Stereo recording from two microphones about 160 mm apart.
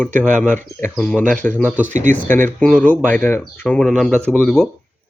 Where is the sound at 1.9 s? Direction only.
50° right (ahead or behind).